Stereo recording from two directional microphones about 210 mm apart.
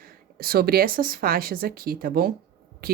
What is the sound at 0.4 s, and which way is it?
Speech, 45° right (ahead or behind).